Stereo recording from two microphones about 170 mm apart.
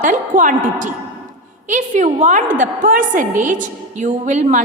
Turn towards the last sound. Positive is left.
turn(degrees=-45)  # may be behind; listen again after turning